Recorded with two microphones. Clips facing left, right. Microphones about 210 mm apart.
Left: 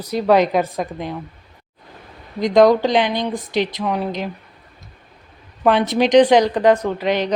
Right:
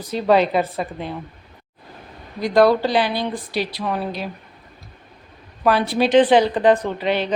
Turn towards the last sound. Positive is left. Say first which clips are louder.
# left 2 dB
turn(degrees=15)  # may be behind; listen again after turning